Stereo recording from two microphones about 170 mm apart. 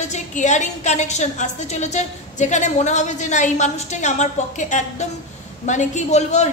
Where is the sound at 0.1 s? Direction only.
45° left (ahead or behind).